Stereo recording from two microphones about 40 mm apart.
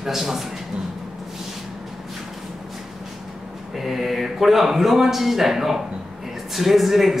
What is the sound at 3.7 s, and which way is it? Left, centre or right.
A man's voice, centre.